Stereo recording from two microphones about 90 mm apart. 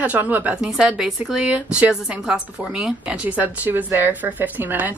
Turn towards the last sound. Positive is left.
turn(degrees=-20)  # may be behind; listen again after turning